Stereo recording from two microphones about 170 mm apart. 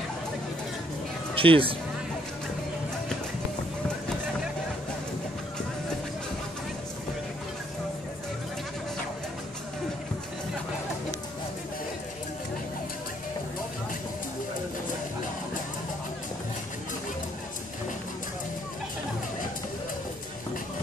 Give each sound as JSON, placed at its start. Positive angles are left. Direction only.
{"t": 1.3, "sound": "speech", "side_deg": -30}